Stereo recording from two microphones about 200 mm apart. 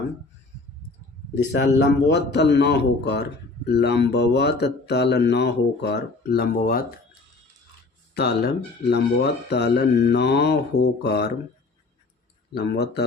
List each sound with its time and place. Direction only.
1.5 s speech: 60° left (ahead or behind)
8.1 s speech: 55° left (ahead or behind)
12.5 s speech: 55° left (ahead or behind)